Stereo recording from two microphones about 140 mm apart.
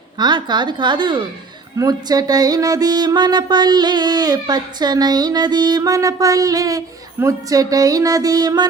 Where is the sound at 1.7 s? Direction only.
25° right (ahead or behind).